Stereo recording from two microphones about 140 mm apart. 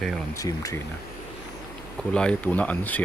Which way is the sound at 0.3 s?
25° left (ahead or behind).